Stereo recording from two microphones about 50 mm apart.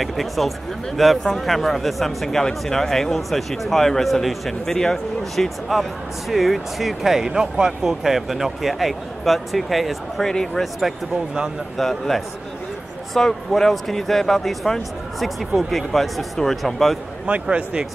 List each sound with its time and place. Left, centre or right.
0.0 s speech: centre
10.2 s speech: centre
11.7 s speech: centre
17.3 s speech: right